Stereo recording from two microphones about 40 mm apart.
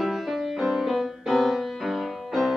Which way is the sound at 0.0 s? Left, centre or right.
Centre.